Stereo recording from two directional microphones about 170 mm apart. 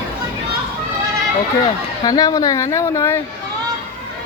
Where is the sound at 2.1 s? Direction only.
20° left (ahead or behind).